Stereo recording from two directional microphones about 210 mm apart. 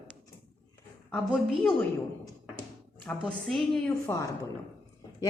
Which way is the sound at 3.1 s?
Centre (ahead or behind).